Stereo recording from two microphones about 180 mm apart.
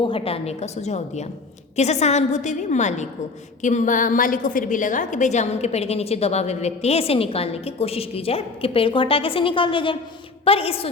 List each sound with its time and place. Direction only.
0.0 s a woman's voice: 30° left (ahead or behind)